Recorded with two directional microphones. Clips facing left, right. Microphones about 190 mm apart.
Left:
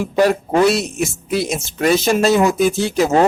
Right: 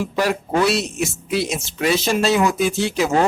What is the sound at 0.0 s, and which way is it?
A man's voice, 45° left (ahead or behind).